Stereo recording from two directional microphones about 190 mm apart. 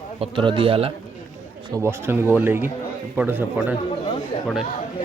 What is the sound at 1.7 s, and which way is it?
Speech, 15° right (ahead or behind).